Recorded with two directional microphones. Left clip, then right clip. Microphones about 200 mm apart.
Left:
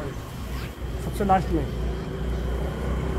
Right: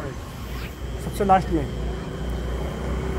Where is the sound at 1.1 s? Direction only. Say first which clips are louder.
Right 3 dB; 45° right (ahead or behind).